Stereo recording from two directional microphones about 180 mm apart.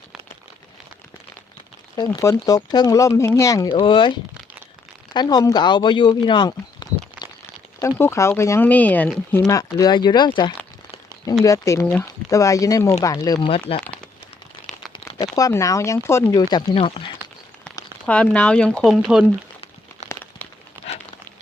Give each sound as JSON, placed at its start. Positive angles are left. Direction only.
{"t": 2.0, "sound": "speech", "side_deg": 20}
{"t": 5.1, "sound": "speech", "side_deg": 25}
{"t": 6.2, "sound": "a sound", "side_deg": 25}
{"t": 7.8, "sound": "speech", "side_deg": 15}
{"t": 9.5, "sound": "speech", "side_deg": 20}
{"t": 14.9, "sound": "speech", "side_deg": 20}
{"t": 16.7, "sound": "speech", "side_deg": 35}
{"t": 18.0, "sound": "speech", "side_deg": 5}
{"t": 19.2, "sound": "a sound", "side_deg": 30}
{"t": 20.8, "sound": "a sound", "side_deg": -10}